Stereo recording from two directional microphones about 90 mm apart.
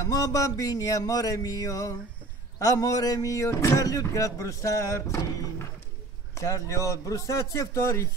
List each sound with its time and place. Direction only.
0.0 s speech: 40° left (ahead or behind)